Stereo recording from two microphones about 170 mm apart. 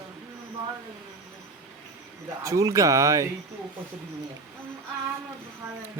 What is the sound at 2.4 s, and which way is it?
Speech, 20° right (ahead or behind).